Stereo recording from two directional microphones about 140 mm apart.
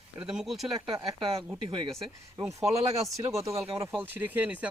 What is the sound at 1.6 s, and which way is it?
Speech, 35° right (ahead or behind).